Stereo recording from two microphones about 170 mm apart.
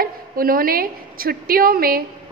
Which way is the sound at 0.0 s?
60° right (ahead or behind).